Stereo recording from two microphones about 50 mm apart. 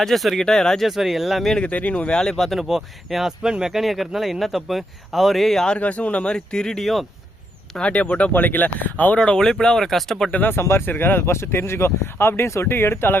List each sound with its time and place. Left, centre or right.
0.0 s a man's voice: centre
0.9 s a man's voice: centre
1.6 s speech: left
2.1 s speech: centre
2.6 s a man's voice: centre
5.8 s speech: left
6.2 s speech: centre
7.8 s speech: left
8.3 s speech: left
9.1 s speech: centre
10.5 s speech: left
10.8 s speech: left